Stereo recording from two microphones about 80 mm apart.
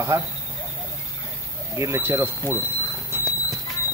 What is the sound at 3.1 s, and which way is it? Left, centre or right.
Horse, right.